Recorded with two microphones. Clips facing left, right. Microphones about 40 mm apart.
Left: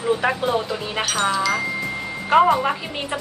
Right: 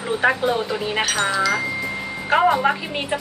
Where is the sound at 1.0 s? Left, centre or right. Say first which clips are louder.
Left 1 dB; centre.